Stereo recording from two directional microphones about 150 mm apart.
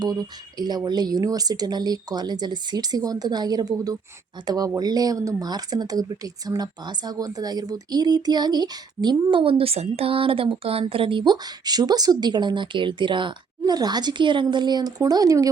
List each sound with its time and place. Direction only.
0.0 s speech: 25° right (ahead or behind)